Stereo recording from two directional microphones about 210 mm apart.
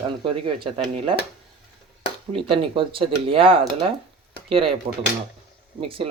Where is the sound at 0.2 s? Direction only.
25° right (ahead or behind).